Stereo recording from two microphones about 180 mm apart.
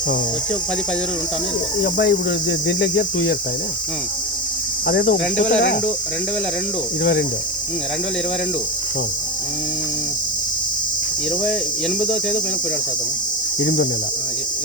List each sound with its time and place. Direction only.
1.8 s cricket: 70° left (ahead or behind)
5.5 s speech: 90° left
7.0 s cricket: 65° left (ahead or behind)
13.6 s cricket: 75° left (ahead or behind)